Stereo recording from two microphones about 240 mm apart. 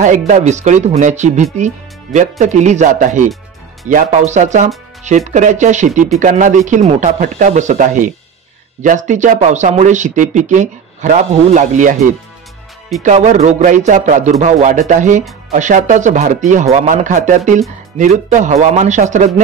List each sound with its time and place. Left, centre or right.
0.0 s speech: right
13.0 s speech: right